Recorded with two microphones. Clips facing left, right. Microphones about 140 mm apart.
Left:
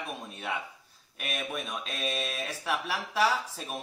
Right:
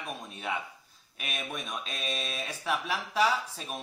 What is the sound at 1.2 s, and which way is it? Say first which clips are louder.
A man's voice: left 3 dB; centre (ahead or behind).